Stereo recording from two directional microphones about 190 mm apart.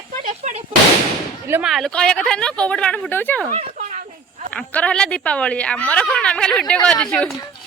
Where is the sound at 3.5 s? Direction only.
40° right (ahead or behind).